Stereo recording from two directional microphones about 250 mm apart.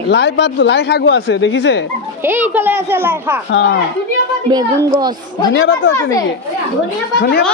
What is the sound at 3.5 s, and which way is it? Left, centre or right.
Speech, left.